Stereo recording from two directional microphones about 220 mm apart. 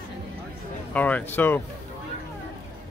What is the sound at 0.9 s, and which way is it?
Speech, 5° left (ahead or behind).